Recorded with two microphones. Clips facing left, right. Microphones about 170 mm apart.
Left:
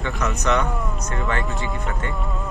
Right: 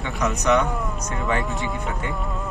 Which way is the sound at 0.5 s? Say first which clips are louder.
Right 2 dB; centre (ahead or behind).